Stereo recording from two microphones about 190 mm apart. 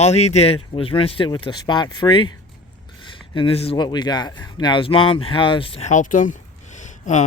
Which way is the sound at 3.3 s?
30° left (ahead or behind).